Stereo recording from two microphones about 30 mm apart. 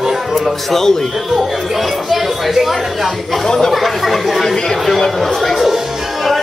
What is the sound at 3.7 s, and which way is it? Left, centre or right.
Speech, centre.